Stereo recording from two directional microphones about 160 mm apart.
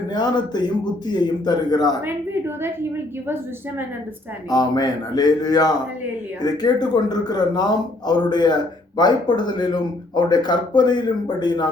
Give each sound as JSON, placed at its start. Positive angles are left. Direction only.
{"t": 0.1, "sound": "a man's voice", "side_deg": 25}
{"t": 2.0, "sound": "a woman's voice", "side_deg": -15}
{"t": 4.4, "sound": "a man's voice", "side_deg": 25}